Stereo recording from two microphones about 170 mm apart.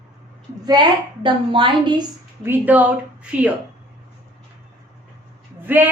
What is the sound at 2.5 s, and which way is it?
Speech, 10° right (ahead or behind).